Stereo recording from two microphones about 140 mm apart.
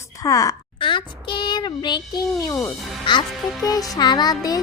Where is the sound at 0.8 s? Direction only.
35° left (ahead or behind).